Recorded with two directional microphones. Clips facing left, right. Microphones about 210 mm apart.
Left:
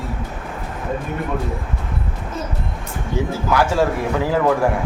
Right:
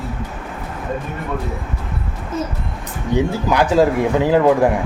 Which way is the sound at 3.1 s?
20° right (ahead or behind).